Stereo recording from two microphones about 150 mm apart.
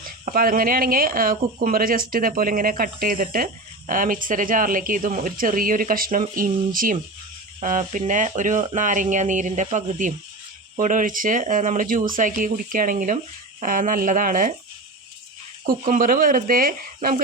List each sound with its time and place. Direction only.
0.0 s speech: 75° right (ahead or behind)
15.6 s speech: 60° right (ahead or behind)